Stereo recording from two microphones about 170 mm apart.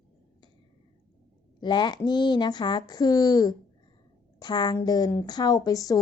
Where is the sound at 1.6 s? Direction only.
25° left (ahead or behind).